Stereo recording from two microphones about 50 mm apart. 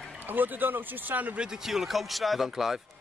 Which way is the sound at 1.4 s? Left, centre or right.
Centre.